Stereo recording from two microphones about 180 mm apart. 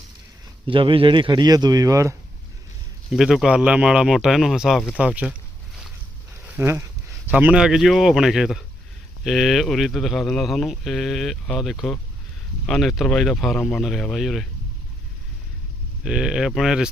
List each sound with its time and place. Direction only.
0.7 s speech: 30° right (ahead or behind)
3.1 s speech: centre (ahead or behind)
6.4 s a sound: 10° right (ahead or behind)
7.3 s speech: 10° right (ahead or behind)
16.0 s speech: 5° right (ahead or behind)